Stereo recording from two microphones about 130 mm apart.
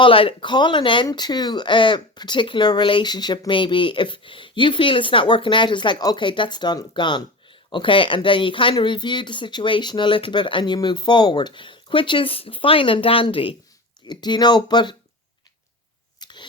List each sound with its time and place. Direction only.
0.0 s speech: 45° left (ahead or behind)
16.2 s engine starting: 35° left (ahead or behind)